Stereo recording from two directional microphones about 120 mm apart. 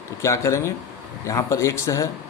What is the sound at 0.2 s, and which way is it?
Speech, 25° left (ahead or behind).